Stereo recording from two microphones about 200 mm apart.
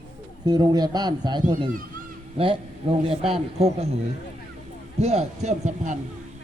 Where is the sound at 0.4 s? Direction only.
20° right (ahead or behind).